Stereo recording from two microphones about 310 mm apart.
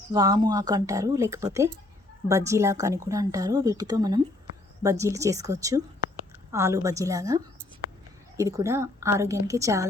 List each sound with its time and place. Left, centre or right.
0.1 s a woman's voice: centre